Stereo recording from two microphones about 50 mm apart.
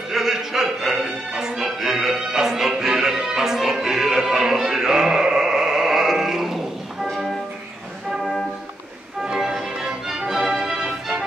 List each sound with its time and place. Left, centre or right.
0.1 s music: centre
9.2 s music: centre